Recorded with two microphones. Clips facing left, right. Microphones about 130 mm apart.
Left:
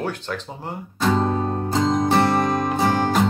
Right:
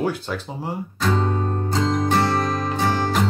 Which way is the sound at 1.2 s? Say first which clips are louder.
Left 1 dB; 15° left (ahead or behind).